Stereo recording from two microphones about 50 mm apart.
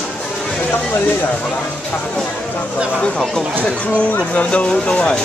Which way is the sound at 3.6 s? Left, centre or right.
Left.